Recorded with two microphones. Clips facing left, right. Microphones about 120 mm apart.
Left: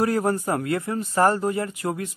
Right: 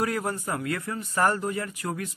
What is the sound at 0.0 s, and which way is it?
Speech, 35° left (ahead or behind).